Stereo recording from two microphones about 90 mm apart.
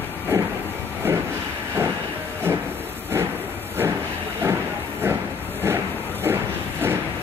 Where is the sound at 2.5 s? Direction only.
25° right (ahead or behind).